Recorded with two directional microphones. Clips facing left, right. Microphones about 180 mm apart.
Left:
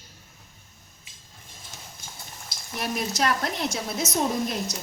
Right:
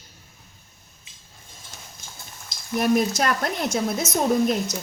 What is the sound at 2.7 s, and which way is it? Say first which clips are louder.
Speech: right 7 dB; 50° right (ahead or behind).